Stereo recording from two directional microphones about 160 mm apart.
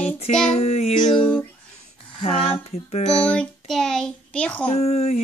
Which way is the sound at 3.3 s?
5° left (ahead or behind).